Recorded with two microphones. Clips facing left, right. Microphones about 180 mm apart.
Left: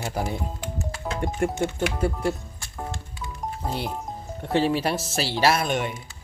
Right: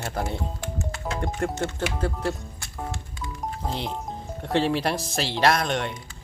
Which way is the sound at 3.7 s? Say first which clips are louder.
Left 1 dB; 5° left (ahead or behind).